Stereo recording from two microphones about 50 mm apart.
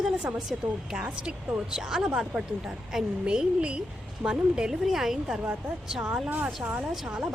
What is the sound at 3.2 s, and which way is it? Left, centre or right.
Speech, right.